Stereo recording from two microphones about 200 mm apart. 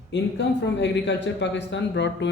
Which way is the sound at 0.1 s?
60° left (ahead or behind).